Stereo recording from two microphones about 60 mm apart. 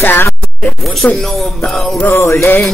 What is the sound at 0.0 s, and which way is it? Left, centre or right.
Speech, left.